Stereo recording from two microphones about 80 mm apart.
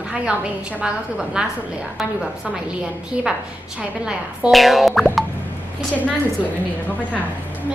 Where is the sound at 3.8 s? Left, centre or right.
Centre.